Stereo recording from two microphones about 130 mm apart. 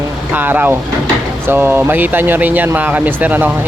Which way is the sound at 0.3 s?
15° right (ahead or behind).